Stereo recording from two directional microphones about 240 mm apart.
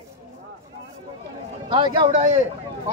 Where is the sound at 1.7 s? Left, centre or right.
Centre.